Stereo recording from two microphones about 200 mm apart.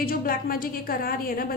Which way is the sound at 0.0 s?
45° left (ahead or behind).